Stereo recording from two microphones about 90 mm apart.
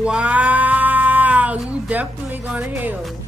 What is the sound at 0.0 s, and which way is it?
Cat, 10° right (ahead or behind).